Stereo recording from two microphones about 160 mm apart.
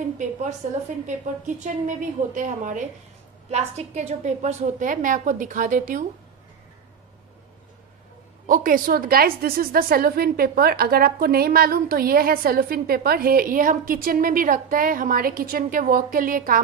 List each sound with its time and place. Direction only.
0.6 s a woman's voice: 50° right (ahead or behind)
3.4 s a woman's voice: 45° right (ahead or behind)
8.5 s a woman's voice: 55° right (ahead or behind)